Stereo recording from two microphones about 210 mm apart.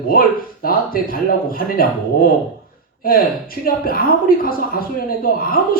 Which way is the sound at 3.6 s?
45° left (ahead or behind).